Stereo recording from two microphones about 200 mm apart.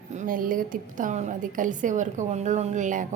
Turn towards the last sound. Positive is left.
turn(degrees=-40)  # may be behind; listen again after turning